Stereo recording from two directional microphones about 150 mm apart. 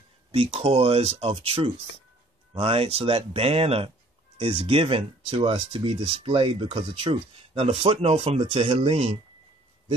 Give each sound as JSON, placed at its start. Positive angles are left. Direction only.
{"t": 0.3, "sound": "speech", "side_deg": -40}